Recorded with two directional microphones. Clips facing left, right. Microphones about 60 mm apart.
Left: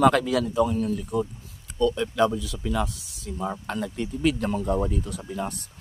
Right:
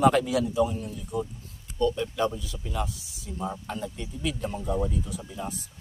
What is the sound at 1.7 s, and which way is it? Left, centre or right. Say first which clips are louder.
Speech: left 2 dB; left.